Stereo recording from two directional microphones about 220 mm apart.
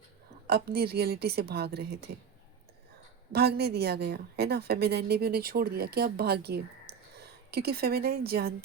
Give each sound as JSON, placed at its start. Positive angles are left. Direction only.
{"t": 0.4, "sound": "a woman's voice", "side_deg": -45}
{"t": 3.3, "sound": "a woman's voice", "side_deg": -45}